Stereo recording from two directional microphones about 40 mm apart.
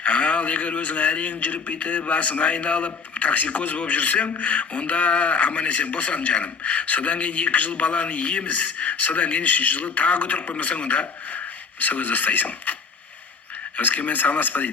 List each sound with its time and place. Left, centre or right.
0.0 s a man's voice: left
13.7 s speech: left